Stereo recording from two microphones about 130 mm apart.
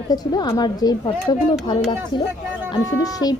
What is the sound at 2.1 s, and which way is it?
Speech, 35° left (ahead or behind).